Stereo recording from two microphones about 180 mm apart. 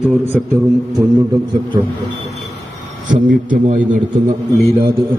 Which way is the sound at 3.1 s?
45° right (ahead or behind).